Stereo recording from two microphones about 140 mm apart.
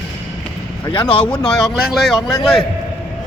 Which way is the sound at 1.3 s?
5° left (ahead or behind).